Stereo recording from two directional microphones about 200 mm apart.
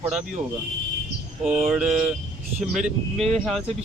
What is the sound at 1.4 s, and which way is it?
Speech, 5° right (ahead or behind).